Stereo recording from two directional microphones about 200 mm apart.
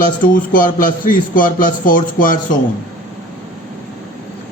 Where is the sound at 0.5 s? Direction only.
45° left (ahead or behind).